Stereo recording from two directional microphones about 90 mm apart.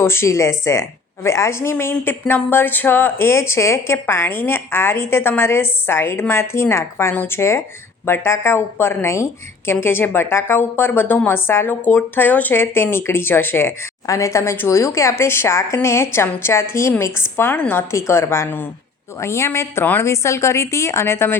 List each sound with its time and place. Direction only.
0.0 s a woman's voice: 30° left (ahead or behind)
14.1 s a woman's voice: 35° left (ahead or behind)